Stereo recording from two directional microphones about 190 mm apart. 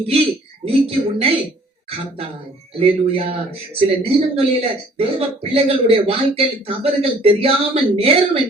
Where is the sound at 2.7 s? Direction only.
30° right (ahead or behind).